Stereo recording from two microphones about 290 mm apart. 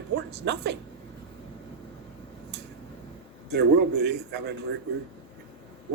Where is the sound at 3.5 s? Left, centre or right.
Right.